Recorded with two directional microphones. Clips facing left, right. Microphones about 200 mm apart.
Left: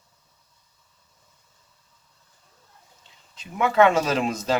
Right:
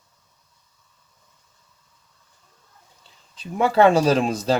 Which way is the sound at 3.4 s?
35° right (ahead or behind).